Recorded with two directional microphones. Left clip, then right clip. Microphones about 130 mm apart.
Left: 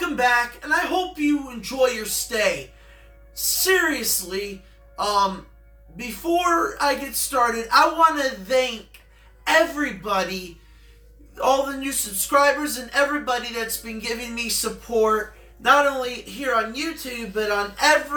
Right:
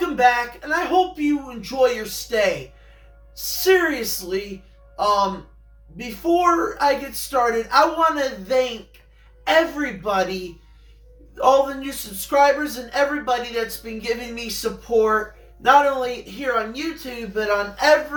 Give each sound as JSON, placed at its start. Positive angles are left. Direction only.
{"t": 0.0, "sound": "a man's voice", "side_deg": 15}
{"t": 11.3, "sound": "a man's voice", "side_deg": 20}